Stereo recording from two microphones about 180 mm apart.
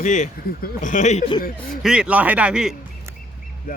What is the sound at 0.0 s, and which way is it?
Speech, 45° left (ahead or behind).